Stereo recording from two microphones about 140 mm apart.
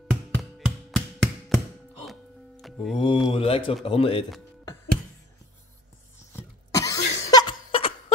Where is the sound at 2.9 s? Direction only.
35° left (ahead or behind).